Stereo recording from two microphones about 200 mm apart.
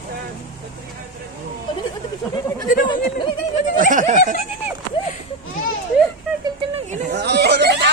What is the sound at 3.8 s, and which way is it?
Speech, 40° right (ahead or behind).